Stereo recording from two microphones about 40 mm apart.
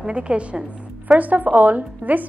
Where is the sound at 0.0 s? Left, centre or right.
Right.